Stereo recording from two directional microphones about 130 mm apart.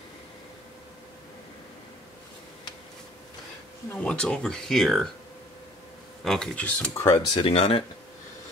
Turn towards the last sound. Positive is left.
turn(degrees=45)  # may be behind; listen again after turning